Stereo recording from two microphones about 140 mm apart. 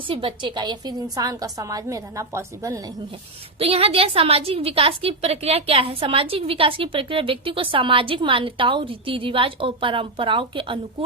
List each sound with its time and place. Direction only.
0.1 s a woman's voice: 40° right (ahead or behind); by 2.8 s 25° right (ahead or behind)
3.6 s a woman's voice: 45° right (ahead or behind)